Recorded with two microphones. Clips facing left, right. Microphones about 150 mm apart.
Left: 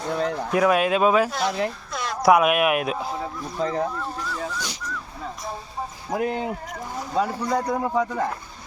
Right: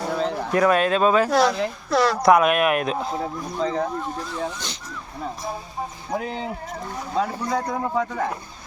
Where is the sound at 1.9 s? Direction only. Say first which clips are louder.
Right 11 dB; 90° right.